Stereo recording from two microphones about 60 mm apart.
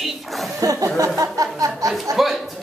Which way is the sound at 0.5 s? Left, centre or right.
Right.